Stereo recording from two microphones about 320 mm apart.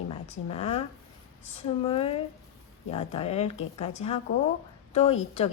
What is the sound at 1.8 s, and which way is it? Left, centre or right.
A woman's voice, centre.